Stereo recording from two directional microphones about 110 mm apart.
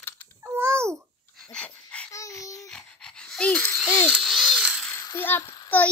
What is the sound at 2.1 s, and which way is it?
Babbling, 30° left (ahead or behind).